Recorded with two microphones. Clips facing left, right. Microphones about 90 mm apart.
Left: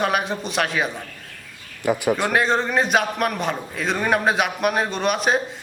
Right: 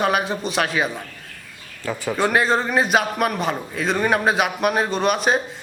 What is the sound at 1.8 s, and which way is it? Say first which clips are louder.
Speech: left 6 dB; 15° left (ahead or behind).